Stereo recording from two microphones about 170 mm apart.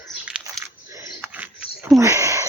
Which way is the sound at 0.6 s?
15° right (ahead or behind).